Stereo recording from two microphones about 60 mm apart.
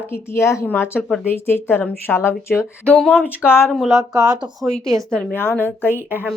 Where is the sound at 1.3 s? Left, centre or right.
Left.